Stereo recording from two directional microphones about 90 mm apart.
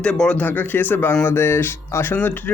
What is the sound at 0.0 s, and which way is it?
A man's voice, 10° left (ahead or behind).